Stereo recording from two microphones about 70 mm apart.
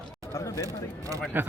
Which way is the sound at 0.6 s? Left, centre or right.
Right.